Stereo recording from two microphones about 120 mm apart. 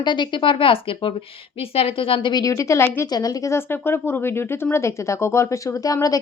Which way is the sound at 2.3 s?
25° left (ahead or behind).